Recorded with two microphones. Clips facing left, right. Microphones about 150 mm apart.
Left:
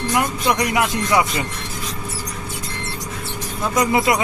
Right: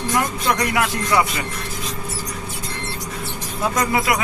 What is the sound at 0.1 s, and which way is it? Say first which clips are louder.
Speech: left 1 dB; 15° left (ahead or behind).